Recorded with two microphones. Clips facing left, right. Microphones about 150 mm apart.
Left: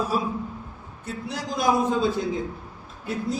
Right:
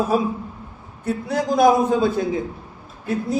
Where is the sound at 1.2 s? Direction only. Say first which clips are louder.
Right 8 dB; 50° right (ahead or behind).